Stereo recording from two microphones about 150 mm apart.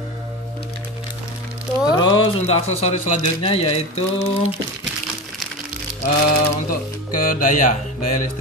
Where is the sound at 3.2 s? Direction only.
35° left (ahead or behind).